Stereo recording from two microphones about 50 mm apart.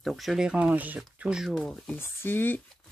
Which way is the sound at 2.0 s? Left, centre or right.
Left.